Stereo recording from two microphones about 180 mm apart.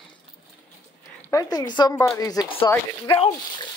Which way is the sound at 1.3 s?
20° left (ahead or behind).